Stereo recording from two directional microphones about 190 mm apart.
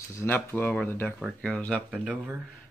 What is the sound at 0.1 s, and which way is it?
Speech, 15° left (ahead or behind).